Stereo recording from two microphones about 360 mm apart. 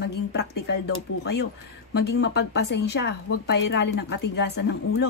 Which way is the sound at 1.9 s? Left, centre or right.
Left.